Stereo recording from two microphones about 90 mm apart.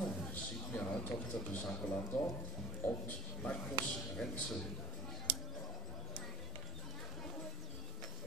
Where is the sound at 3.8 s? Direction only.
10° left (ahead or behind).